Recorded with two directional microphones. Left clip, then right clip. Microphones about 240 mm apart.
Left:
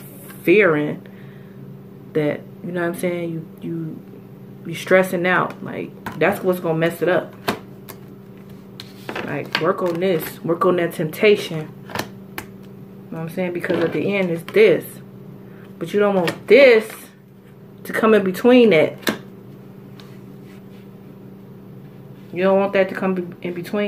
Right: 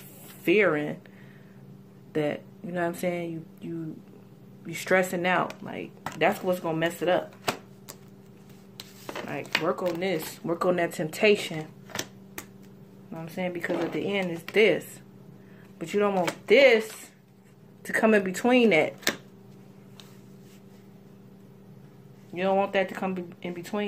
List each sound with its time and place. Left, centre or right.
0.5 s speech: right
2.1 s speech: right
4.6 s speech: right
8.7 s a sound: right
9.6 s speech: right
13.1 s speech: right
15.9 s speech: right
17.8 s speech: right
22.3 s speech: right